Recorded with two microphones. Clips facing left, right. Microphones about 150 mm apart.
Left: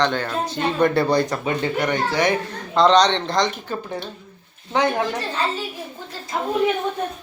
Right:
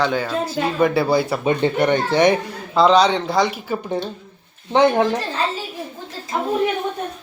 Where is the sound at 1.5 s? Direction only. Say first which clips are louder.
Right 5 dB; 25° right (ahead or behind).